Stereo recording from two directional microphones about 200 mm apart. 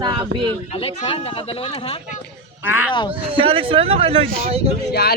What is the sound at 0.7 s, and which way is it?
Speech, 30° left (ahead or behind).